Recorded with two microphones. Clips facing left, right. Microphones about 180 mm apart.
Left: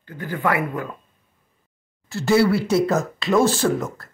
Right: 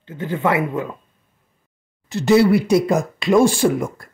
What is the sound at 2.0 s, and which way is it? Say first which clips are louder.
Speech: right 4 dB; 20° right (ahead or behind).